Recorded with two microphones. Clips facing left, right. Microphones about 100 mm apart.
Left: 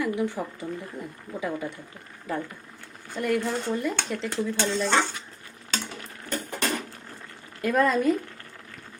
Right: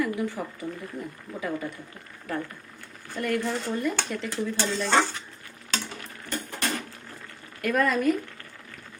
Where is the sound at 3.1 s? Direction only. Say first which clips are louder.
Left 1 dB; 10° left (ahead or behind).